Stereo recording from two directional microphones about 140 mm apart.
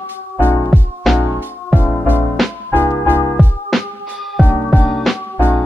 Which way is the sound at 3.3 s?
Centre (ahead or behind).